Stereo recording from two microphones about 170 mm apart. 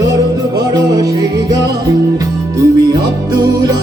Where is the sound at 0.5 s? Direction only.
20° right (ahead or behind).